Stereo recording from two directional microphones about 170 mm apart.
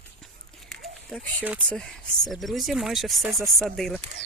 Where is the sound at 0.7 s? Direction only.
Centre (ahead or behind).